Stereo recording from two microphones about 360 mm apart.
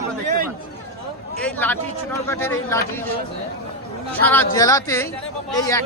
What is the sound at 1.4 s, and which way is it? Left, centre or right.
A man's voice, centre.